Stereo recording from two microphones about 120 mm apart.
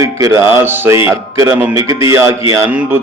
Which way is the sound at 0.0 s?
25° right (ahead or behind).